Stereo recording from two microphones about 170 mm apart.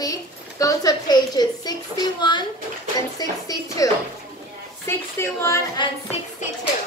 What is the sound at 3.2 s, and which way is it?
Music, 20° left (ahead or behind).